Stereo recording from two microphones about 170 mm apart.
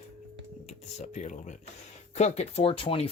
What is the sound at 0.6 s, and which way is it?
Speech, 45° left (ahead or behind).